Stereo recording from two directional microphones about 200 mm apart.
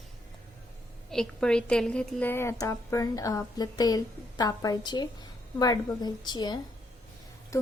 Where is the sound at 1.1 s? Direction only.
5° left (ahead or behind).